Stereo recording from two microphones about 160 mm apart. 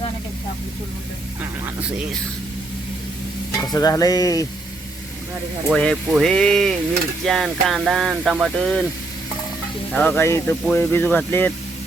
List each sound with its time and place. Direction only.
3.7 s frying: 20° left (ahead or behind)
5.7 s speech: 5° left (ahead or behind)
9.9 s speech: 10° left (ahead or behind)